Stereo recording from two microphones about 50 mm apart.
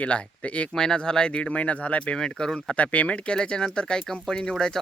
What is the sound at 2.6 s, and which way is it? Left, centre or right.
Speech, left.